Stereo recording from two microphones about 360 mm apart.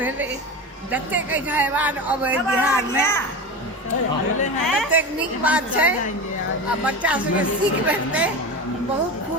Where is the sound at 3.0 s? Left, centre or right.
Centre.